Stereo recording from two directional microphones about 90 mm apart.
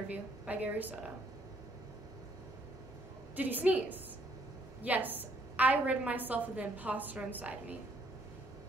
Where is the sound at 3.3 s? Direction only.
20° right (ahead or behind).